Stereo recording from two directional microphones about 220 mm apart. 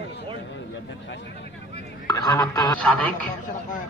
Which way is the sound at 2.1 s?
15° left (ahead or behind).